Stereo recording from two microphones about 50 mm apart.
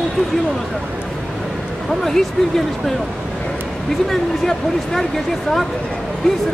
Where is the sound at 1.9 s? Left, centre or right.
Centre.